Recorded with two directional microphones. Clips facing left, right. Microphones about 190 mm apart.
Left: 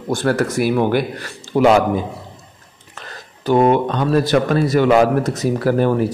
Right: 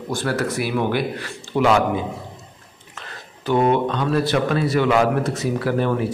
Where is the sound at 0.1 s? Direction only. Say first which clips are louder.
Left 5 dB; 50° left (ahead or behind).